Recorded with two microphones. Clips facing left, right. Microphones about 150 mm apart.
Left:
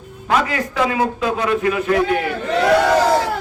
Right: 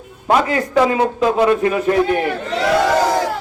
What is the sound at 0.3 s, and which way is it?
A man's voice, 40° right (ahead or behind).